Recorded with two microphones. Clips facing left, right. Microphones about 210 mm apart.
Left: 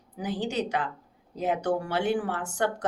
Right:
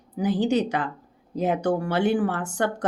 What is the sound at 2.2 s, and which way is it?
Speech, 50° right (ahead or behind).